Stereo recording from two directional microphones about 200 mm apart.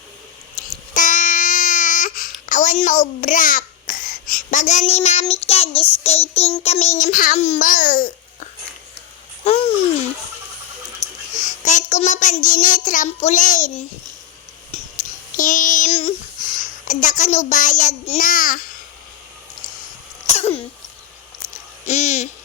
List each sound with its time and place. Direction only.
0.9 s a sound: 40° left (ahead or behind)
2.5 s babbling: 40° left (ahead or behind)
5.2 s child singing: 30° left (ahead or behind)
9.4 s babbling: 30° left (ahead or behind)
11.0 s a child's voice: 40° left (ahead or behind)
14.7 s music: 35° left (ahead or behind)
15.4 s child singing: 40° left (ahead or behind)
20.2 s cough: 35° left (ahead or behind)
21.8 s child singing: 35° left (ahead or behind)